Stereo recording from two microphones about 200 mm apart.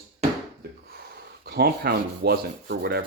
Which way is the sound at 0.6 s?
55° right (ahead or behind).